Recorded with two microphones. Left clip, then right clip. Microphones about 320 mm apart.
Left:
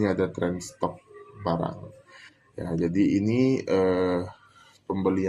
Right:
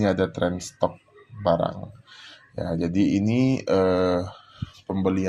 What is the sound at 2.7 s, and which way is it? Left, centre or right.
Speech, right.